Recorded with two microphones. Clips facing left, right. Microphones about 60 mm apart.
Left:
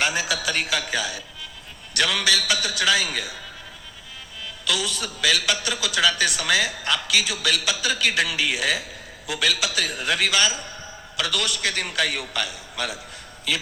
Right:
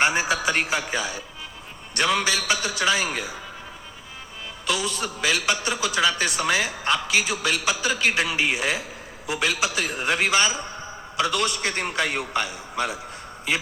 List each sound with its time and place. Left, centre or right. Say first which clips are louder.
0.0 s a man's voice: right 3 dB; right
4.8 s a man's voice: even; right